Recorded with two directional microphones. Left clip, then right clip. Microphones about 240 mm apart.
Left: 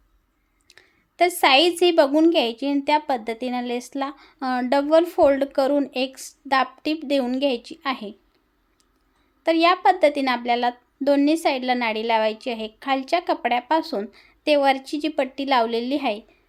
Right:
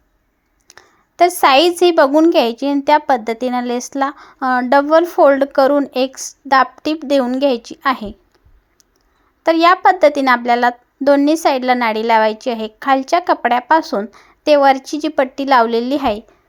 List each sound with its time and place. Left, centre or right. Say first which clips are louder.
0.7 s a sound: right 8 dB; centre
1.8 s a woman's voice: right 6 dB; centre
9.4 s a woman's voice: right 7 dB; centre